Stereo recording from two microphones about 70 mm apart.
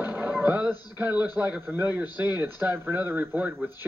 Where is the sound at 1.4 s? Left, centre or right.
Right.